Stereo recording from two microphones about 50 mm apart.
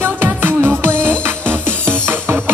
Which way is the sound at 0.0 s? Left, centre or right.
Right.